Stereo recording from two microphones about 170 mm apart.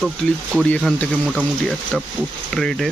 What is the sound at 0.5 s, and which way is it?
Speech, 5° left (ahead or behind).